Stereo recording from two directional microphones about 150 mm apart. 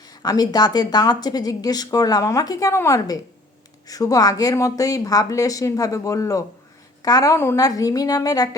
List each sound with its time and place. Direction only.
0.1 s speech: 25° left (ahead or behind)